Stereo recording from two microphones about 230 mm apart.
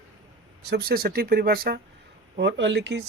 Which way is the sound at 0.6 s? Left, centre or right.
Right.